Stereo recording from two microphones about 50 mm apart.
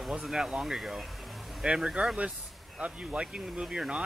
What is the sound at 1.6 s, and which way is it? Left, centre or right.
Speech, centre.